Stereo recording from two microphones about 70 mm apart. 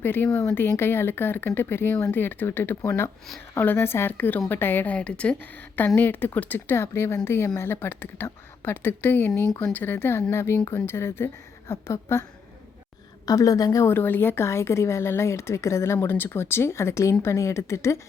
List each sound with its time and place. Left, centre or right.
0.0 s a woman's voice: left
4.9 s a woman's voice: centre; by 12.2 s left
13.2 s a woman's voice: left
13.8 s speech: left